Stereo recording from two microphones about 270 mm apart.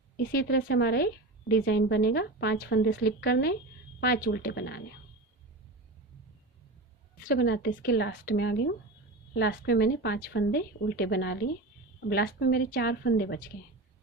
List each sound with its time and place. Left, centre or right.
0.2 s a woman's voice: left
7.2 s a woman's voice: left